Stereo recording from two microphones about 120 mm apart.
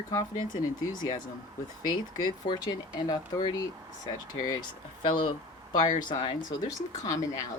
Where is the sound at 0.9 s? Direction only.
35° left (ahead or behind).